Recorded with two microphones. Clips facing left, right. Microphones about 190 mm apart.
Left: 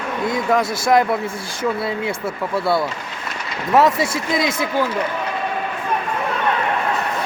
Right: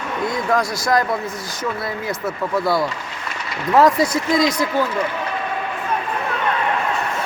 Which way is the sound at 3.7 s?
25° left (ahead or behind).